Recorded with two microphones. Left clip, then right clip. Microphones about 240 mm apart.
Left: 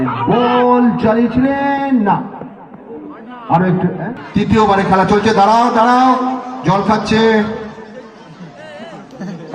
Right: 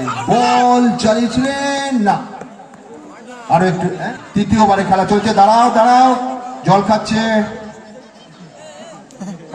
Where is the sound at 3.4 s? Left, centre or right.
Right.